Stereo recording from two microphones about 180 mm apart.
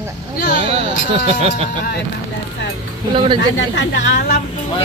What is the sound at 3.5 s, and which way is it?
Speech, 80° left.